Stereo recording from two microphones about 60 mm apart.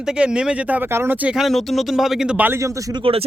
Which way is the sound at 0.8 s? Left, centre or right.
Right.